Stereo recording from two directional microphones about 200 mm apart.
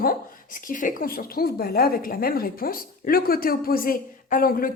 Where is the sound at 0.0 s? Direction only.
45° left (ahead or behind).